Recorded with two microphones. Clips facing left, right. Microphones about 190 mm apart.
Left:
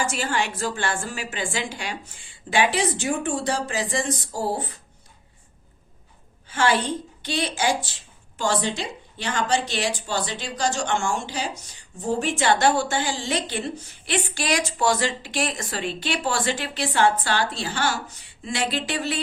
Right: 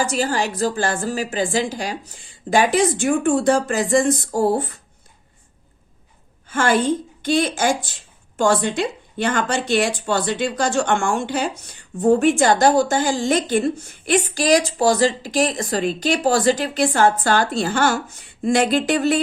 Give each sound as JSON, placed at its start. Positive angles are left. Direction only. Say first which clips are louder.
{"t": 0.0, "sound": "a woman's voice", "louder": "right 5 dB", "side_deg": -35}
{"t": 6.5, "sound": "speech", "louder": "right 4 dB", "side_deg": -50}